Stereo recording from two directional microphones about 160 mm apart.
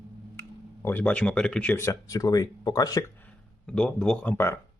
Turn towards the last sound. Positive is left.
turn(degrees=10)  # may be behind; listen again after turning